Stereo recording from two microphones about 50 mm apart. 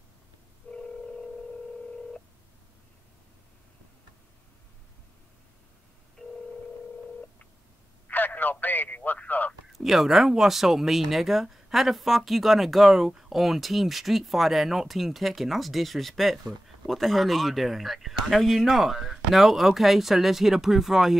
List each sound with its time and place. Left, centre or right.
0.7 s telephone dialing: centre
6.2 s telephone: centre
8.1 s telephone: left
9.7 s speech: centre